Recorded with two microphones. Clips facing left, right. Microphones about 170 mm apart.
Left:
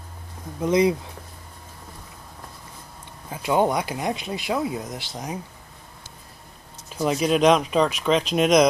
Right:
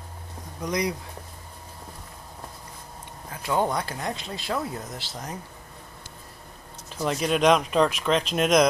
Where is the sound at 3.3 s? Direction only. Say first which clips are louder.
Left 4 dB; 20° left (ahead or behind).